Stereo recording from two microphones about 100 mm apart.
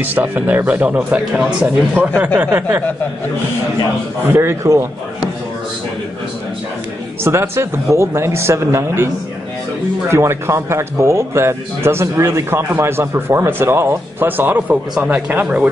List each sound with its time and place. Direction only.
0.0 s speech: 20° right (ahead or behind)
4.3 s speech: 25° right (ahead or behind)
7.2 s speech: 25° right (ahead or behind)